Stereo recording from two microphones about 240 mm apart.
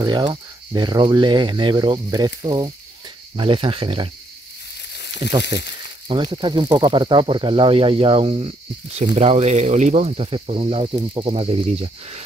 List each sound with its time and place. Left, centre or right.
0.0 s speech: centre
5.5 s speech: centre